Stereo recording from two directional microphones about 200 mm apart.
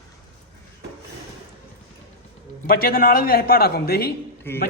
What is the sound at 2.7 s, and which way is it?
A man's voice, 50° left (ahead or behind).